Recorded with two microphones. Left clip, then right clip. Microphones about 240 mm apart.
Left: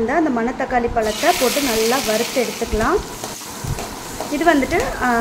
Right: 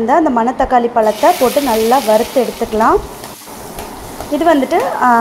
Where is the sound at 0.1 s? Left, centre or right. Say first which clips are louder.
Right 7 dB; centre.